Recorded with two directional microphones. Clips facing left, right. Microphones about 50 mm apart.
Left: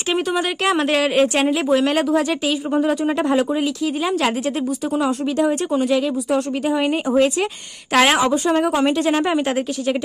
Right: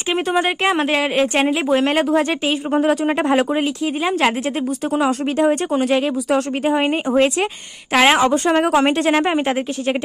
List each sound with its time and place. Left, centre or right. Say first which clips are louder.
0.3 s a woman's voice: right 4 dB; right
1.7 s speech: right 1 dB; right
4.9 s speech: right 2 dB; right
6.6 s speech: right 1 dB; right
7.9 s a woman's voice: right 1 dB; centre
8.5 s speech: right 2 dB; right
9.1 s a woman's voice: right 1 dB; right